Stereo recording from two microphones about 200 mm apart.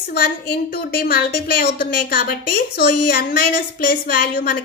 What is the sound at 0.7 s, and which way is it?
A woman's voice, 50° left (ahead or behind).